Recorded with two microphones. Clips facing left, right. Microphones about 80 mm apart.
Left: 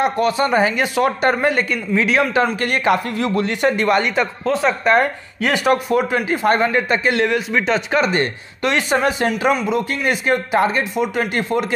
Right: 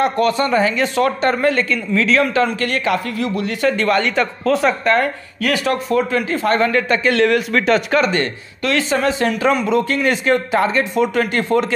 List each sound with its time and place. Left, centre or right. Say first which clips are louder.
0.0 s speech: right 1 dB; centre
0.5 s speech: even; left
3.7 s speech: even; centre
4.8 s speech: left 1 dB; left
8.2 s speech: left 1 dB; left